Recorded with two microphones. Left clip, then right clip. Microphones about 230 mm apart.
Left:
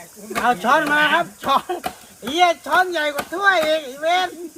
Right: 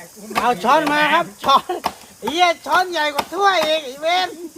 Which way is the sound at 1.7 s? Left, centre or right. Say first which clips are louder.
Right 3 dB; centre.